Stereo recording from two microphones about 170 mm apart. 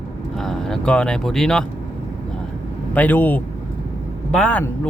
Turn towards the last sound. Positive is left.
turn(degrees=5)  # may be behind; listen again after turning